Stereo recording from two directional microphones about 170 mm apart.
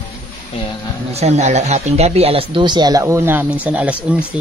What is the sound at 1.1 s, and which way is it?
Speech, 40° right (ahead or behind).